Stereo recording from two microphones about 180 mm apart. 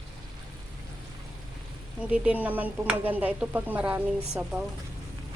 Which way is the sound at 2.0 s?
5° right (ahead or behind).